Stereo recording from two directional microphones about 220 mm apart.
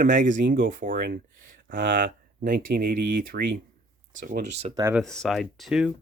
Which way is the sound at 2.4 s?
40° right (ahead or behind).